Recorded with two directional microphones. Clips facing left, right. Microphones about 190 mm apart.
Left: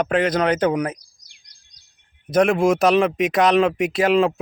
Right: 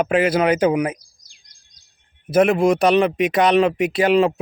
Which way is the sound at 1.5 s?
50° right (ahead or behind).